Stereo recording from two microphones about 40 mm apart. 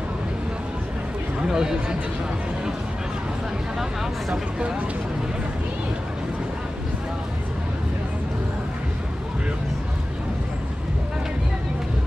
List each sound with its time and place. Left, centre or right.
1.4 s speech: centre
4.3 s speech: right